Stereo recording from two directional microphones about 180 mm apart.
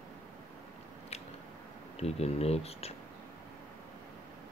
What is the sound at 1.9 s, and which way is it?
Speech, 35° left (ahead or behind).